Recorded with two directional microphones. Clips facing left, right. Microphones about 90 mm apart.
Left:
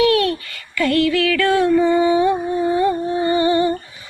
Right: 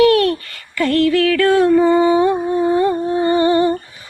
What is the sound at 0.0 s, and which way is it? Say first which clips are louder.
Child singing: right 4 dB; 45° right (ahead or behind).